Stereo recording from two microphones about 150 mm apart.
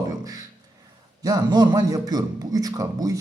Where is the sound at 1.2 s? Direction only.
25° right (ahead or behind).